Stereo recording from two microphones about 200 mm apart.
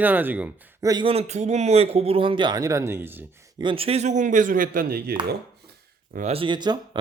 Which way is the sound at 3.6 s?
25° right (ahead or behind).